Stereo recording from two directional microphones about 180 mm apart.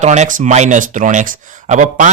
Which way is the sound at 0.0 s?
40° right (ahead or behind).